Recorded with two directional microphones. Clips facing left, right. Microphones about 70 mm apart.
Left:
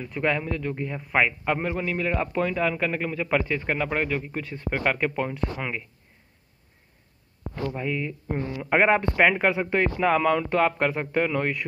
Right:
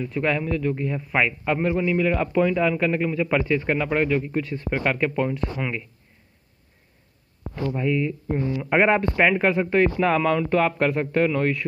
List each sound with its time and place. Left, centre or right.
0.0 s a man's voice: left
7.6 s a man's voice: centre
8.6 s a man's voice: centre
9.1 s speech: left
9.5 s a man's voice: centre